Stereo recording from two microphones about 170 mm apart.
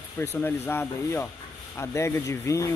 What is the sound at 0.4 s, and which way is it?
Speech, 10° left (ahead or behind).